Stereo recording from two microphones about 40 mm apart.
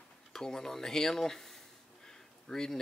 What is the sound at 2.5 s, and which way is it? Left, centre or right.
Speech, centre.